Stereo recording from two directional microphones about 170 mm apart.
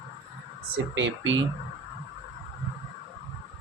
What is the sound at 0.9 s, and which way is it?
Speech, 90° right.